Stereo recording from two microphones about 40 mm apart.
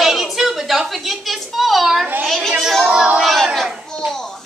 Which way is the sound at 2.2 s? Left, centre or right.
Centre.